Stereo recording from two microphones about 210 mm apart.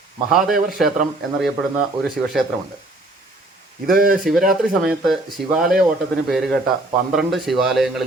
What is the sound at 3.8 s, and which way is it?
Speech, 45° right (ahead or behind).